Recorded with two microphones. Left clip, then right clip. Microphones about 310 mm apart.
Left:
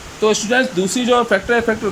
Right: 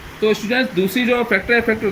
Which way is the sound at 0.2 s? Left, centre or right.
Left.